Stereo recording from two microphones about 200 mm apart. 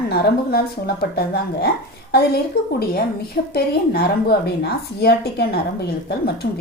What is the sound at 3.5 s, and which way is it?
A woman's voice, 50° left (ahead or behind).